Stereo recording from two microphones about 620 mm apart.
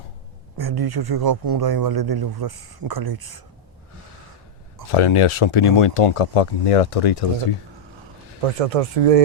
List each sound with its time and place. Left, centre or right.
0.5 s speech: right
4.9 s speech: left
8.5 s speech: right